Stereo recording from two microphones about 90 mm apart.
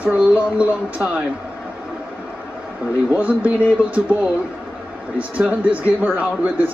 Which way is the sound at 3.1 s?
20° right (ahead or behind).